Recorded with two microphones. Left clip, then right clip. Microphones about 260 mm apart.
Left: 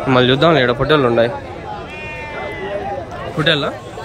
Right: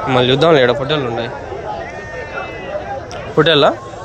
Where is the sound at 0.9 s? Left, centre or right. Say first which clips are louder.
Left 5 dB; centre.